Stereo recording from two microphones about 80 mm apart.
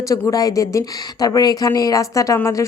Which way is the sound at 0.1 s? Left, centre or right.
Left.